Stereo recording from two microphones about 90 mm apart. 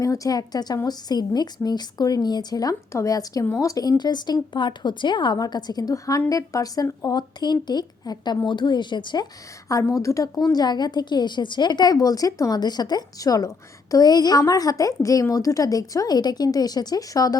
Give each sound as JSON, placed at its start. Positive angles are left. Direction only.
{"t": 0.0, "sound": "a woman's voice", "side_deg": 35}
{"t": 9.6, "sound": "a woman's voice", "side_deg": 40}